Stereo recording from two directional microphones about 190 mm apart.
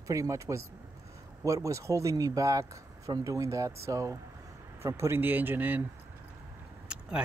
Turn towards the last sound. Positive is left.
turn(degrees=-5)  # may be behind; listen again after turning